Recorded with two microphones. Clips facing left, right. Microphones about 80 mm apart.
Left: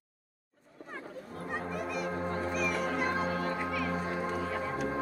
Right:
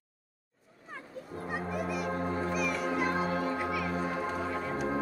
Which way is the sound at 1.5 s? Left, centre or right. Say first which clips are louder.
Right 1 dB; centre.